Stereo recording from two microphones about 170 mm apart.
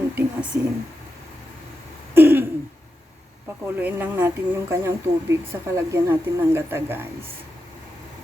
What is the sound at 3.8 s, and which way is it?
Speech, 10° right (ahead or behind).